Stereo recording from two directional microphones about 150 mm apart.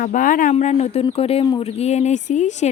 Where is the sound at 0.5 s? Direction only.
45° left (ahead or behind).